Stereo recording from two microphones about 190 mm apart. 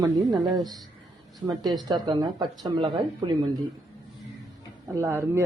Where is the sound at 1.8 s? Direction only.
20° right (ahead or behind).